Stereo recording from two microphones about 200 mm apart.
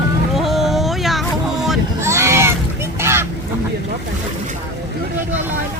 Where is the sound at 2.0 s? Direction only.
15° right (ahead or behind).